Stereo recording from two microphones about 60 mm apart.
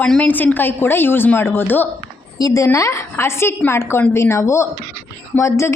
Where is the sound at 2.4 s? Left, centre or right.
Left.